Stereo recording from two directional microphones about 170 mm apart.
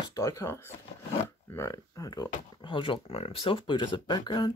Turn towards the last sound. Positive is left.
turn(degrees=25)  # may be behind; listen again after turning